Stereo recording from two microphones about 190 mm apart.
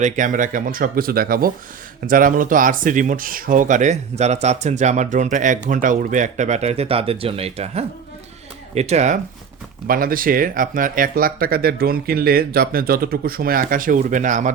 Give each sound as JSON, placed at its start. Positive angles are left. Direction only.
{"t": 0.0, "sound": "speech", "side_deg": -40}
{"t": 9.8, "sound": "speech", "side_deg": -50}